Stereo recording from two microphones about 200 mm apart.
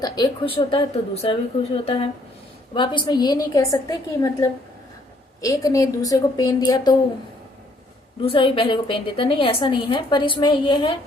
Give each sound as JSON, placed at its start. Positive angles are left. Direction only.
{"t": 0.0, "sound": "a woman's voice", "side_deg": 25}
{"t": 8.2, "sound": "a woman's voice", "side_deg": 25}